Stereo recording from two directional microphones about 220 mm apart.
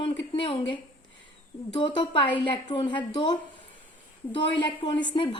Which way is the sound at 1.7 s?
20° left (ahead or behind).